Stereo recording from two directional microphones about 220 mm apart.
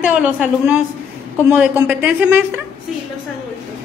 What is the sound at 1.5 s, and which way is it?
Speech, 10° right (ahead or behind).